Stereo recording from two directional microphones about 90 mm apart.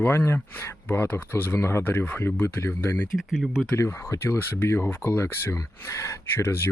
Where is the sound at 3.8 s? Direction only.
30° left (ahead or behind).